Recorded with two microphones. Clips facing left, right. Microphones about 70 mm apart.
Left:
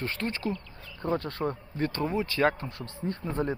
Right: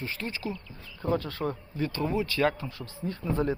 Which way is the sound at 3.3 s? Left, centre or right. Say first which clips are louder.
Right 3 dB; left.